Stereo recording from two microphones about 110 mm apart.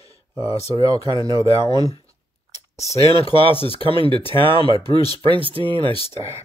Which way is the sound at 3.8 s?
50° right (ahead or behind).